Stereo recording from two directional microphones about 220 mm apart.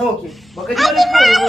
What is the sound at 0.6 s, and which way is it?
Speech, centre (ahead or behind).